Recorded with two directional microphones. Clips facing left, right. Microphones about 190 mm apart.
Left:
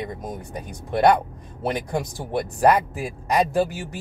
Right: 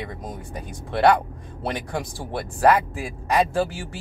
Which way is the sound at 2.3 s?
15° left (ahead or behind).